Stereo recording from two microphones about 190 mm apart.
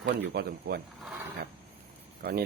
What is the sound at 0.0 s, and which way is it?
Speech, 55° right (ahead or behind).